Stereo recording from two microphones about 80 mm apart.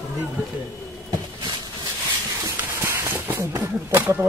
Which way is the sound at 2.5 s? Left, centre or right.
Right.